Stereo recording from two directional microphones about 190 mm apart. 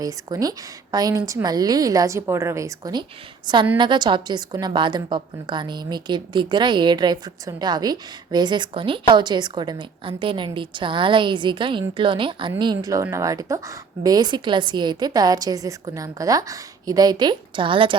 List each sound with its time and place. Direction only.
0.0 s a woman's voice: 20° right (ahead or behind)